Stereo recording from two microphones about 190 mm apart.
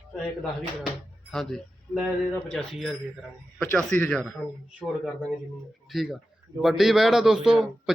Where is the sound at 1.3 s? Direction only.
Centre (ahead or behind).